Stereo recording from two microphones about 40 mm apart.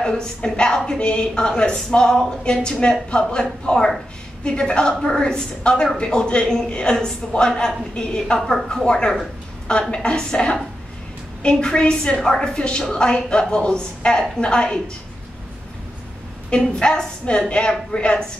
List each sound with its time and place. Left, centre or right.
0.0 s a woman's voice: centre
8.4 s speech: centre
8.8 s a woman's voice: centre
16.7 s a woman's voice: centre